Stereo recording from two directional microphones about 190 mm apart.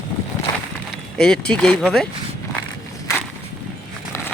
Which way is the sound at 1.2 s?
5° left (ahead or behind).